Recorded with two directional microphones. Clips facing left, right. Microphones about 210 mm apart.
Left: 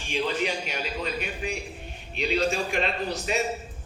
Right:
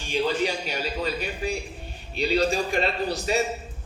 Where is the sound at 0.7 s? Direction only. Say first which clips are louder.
Right 3 dB; 35° right (ahead or behind).